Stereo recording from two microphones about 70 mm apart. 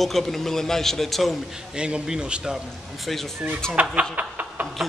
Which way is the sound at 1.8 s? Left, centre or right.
Centre.